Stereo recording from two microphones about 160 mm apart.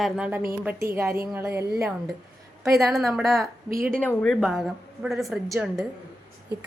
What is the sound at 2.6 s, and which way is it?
A woman's voice, centre (ahead or behind).